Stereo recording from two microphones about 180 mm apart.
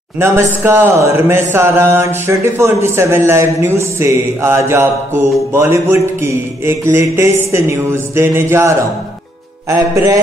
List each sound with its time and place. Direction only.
0.2 s speech: 15° right (ahead or behind)